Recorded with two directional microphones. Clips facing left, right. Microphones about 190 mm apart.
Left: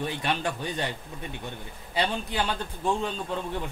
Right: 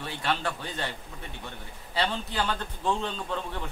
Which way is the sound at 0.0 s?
15° left (ahead or behind).